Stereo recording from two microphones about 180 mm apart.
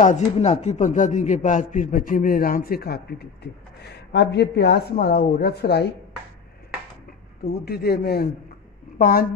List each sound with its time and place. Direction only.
0.0 s speech: 40° left (ahead or behind); by 5.9 s 65° left (ahead or behind)
7.4 s a woman's voice: 60° left (ahead or behind)